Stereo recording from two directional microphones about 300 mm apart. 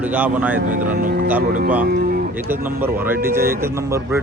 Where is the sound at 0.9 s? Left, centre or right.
Right.